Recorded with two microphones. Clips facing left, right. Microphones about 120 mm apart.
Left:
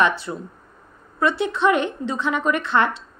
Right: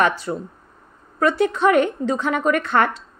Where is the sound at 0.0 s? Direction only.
45° right (ahead or behind).